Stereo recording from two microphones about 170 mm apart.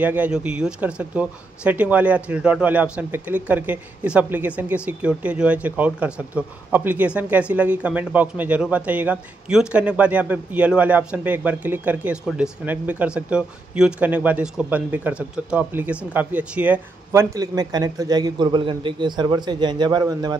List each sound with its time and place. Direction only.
0.0 s speech: 10° right (ahead or behind)